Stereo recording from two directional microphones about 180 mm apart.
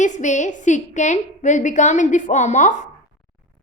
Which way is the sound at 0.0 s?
45° left (ahead or behind).